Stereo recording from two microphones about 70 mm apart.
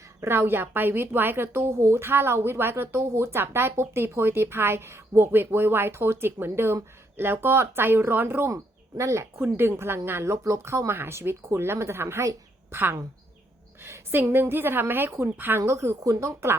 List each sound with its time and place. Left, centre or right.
0.2 s a woman's voice: right
8.5 s speech: right
9.4 s a woman's voice: right
12.7 s a woman's voice: right